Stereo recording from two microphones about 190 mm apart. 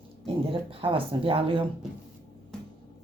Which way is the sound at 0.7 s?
30° right (ahead or behind).